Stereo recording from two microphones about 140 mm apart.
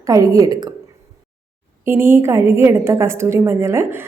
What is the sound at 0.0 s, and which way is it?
Speech, 20° right (ahead or behind).